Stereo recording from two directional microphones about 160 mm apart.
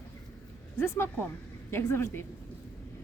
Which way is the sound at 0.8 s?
15° left (ahead or behind).